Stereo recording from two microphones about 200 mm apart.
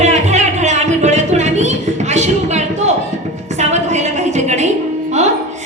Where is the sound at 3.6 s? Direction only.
35° right (ahead or behind).